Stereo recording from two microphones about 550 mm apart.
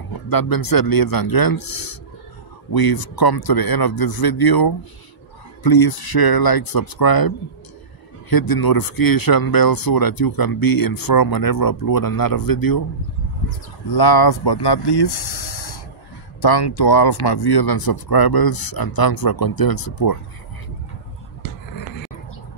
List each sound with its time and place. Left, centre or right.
0.3 s speech: left
13.9 s speech: left